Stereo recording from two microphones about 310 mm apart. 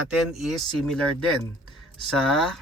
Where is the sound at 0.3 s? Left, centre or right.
Centre.